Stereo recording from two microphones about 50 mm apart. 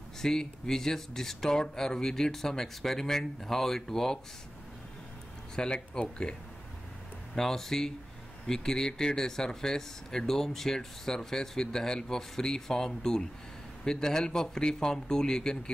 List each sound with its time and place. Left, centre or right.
0.2 s speech: centre
5.6 s speech: centre
7.3 s speech: centre